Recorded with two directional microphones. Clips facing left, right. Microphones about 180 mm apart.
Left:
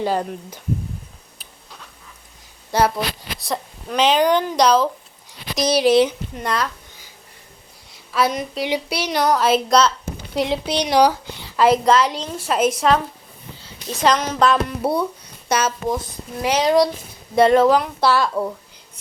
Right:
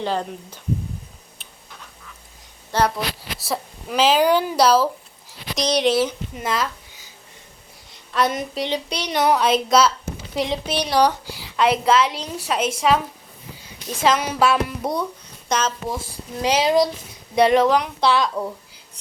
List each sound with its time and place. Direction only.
0.0 s speech: 10° left (ahead or behind)
2.7 s speech: 10° left (ahead or behind)
3.3 s speech: 5° right (ahead or behind)
5.9 s speech: 20° left (ahead or behind)
6.3 s speech: centre (ahead or behind)
7.9 s a woman's voice: centre (ahead or behind)
10.7 s speech: 15° left (ahead or behind)
11.3 s a woman's voice: centre (ahead or behind)
14.8 s speech: 5° left (ahead or behind)
16.4 s speech: 15° right (ahead or behind)
16.6 s speech: centre (ahead or behind)